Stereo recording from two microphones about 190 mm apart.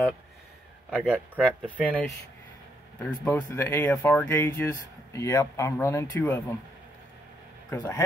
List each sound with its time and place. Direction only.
0.8 s speech: 5° right (ahead or behind)
1.4 s speech: 5° left (ahead or behind)
7.7 s speech: 20° left (ahead or behind)